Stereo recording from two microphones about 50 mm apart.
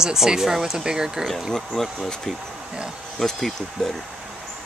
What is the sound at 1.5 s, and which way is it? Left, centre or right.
Speech, centre.